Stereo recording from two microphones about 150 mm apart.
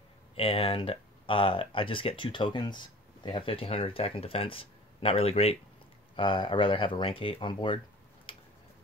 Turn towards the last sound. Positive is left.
turn(degrees=35)  # may be behind; listen again after turning